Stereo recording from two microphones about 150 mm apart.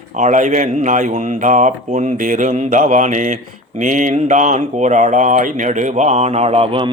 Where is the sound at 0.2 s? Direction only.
55° right (ahead or behind).